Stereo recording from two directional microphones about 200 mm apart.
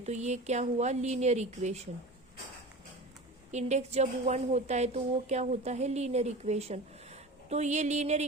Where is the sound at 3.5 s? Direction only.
35° right (ahead or behind).